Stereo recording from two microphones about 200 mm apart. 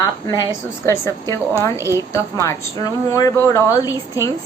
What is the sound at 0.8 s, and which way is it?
A woman's voice, 15° left (ahead or behind).